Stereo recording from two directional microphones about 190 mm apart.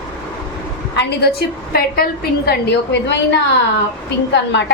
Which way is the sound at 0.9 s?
55° left (ahead or behind).